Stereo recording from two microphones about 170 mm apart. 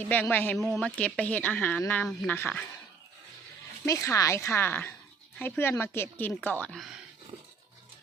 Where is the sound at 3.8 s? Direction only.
20° left (ahead or behind); by 7.0 s centre (ahead or behind).